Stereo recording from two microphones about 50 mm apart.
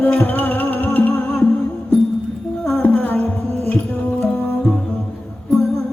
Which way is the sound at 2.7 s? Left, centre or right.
Left.